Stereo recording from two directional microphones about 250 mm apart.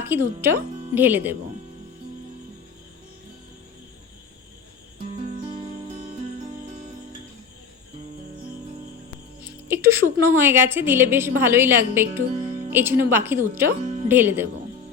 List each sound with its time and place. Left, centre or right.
0.1 s a woman's voice: centre
9.4 s a woman's voice: centre
13.7 s speech: right
14.1 s a woman's voice: centre